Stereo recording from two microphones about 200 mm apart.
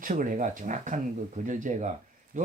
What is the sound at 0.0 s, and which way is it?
Speech, 40° right (ahead or behind).